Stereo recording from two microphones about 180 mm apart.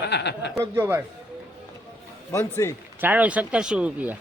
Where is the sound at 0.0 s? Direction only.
70° left (ahead or behind).